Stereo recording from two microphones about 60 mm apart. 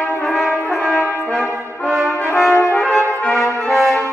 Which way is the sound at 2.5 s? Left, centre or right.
Left.